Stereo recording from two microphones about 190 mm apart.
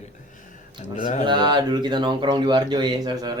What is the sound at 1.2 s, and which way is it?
Speech, 25° right (ahead or behind).